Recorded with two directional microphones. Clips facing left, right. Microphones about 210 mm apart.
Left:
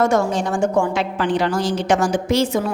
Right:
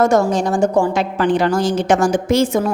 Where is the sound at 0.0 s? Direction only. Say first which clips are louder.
Right 3 dB; 40° right (ahead or behind).